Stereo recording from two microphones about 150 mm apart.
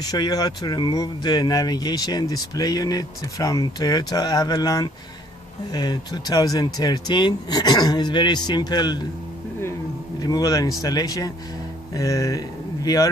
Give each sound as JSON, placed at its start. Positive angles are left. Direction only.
{"t": 0.1, "sound": "speech", "side_deg": 25}
{"t": 10.2, "sound": "speech", "side_deg": 25}